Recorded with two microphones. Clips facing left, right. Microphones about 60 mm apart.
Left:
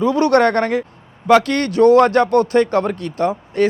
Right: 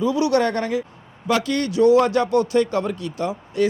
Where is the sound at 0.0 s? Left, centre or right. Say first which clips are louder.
Left 5 dB; left.